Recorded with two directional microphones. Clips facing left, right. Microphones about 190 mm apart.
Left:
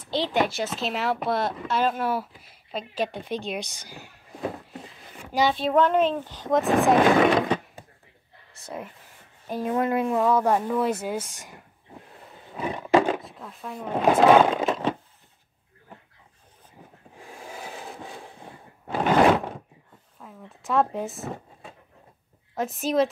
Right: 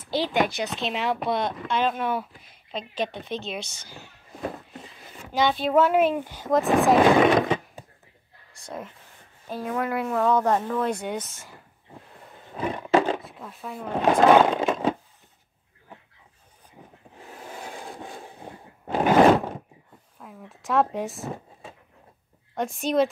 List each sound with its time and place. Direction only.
0.1 s speech: centre (ahead or behind); by 4.1 s 15° left (ahead or behind)
5.2 s a sound: 10° left (ahead or behind)
5.5 s speech: centre (ahead or behind)
8.5 s speech: 5° left (ahead or behind)
9.5 s speech: 20° left (ahead or behind)
10.1 s speech: 10° left (ahead or behind)
12.8 s speech: centre (ahead or behind)
17.3 s a sound: 10° left (ahead or behind)
20.2 s speech: centre (ahead or behind)
22.6 s speech: centre (ahead or behind)